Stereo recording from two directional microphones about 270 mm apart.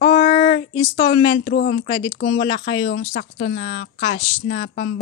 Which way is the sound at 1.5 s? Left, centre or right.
Left.